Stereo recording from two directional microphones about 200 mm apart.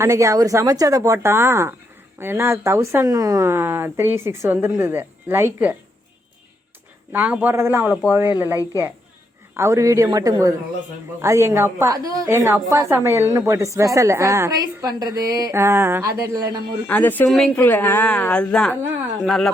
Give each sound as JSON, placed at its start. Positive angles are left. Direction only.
{"t": 0.0, "sound": "a woman's voice", "side_deg": -15}
{"t": 7.1, "sound": "a woman's voice", "side_deg": -10}
{"t": 9.6, "sound": "a woman's voice", "side_deg": -15}
{"t": 16.8, "sound": "a woman's voice", "side_deg": 10}
{"t": 18.8, "sound": "a woman's voice", "side_deg": -10}